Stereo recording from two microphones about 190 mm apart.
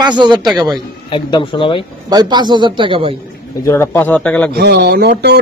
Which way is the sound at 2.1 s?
20° right (ahead or behind).